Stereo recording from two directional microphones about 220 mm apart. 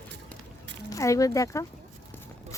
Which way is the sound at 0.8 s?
15° left (ahead or behind).